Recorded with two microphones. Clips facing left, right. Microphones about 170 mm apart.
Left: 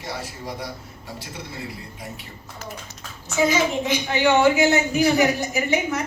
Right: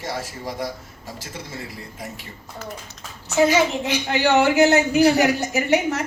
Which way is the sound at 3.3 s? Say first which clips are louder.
Right 3 dB; 70° right (ahead or behind).